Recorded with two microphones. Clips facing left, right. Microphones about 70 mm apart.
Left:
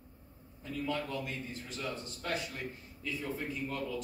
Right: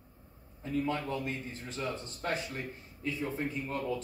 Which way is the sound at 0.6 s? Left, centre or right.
Right.